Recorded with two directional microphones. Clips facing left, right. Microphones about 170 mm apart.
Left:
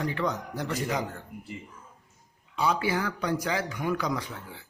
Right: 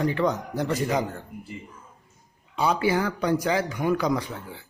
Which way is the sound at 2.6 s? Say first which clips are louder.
Right 4 dB; 30° right (ahead or behind).